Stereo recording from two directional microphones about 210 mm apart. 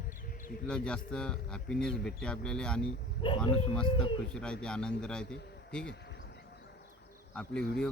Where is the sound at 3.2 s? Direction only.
25° left (ahead or behind).